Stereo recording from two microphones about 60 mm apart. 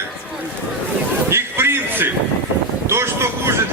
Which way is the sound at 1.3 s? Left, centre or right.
Right.